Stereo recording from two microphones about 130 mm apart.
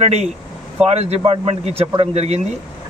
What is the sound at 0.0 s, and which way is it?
A man's voice, 55° right (ahead or behind).